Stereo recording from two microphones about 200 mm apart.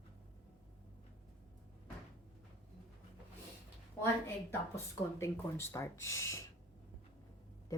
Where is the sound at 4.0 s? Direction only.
15° left (ahead or behind).